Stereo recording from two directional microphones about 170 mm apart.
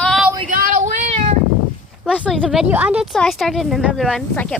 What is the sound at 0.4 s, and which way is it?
Child singing, 50° right (ahead or behind).